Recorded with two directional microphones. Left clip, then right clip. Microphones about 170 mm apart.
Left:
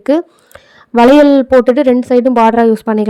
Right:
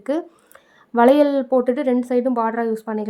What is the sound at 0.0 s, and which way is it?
Speech, 40° left (ahead or behind).